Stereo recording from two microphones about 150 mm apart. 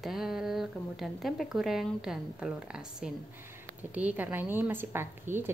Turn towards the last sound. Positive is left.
turn(degrees=-15)  # may be behind; listen again after turning